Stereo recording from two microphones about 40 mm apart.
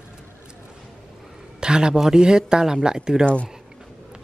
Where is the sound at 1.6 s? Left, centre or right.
Right.